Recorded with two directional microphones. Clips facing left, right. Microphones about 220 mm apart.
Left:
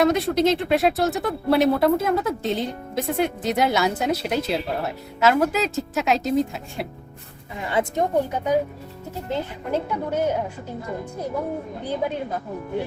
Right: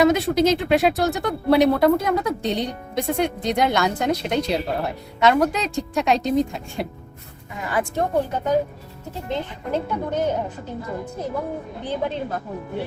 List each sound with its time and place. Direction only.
0.0 s speech: centre (ahead or behind)
7.6 s a woman's voice: 25° left (ahead or behind)
11.9 s a woman's voice: 10° left (ahead or behind)